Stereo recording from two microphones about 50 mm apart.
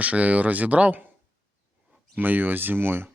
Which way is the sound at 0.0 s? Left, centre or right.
Right.